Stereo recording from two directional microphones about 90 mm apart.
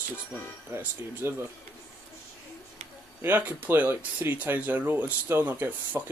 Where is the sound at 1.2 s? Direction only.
30° right (ahead or behind).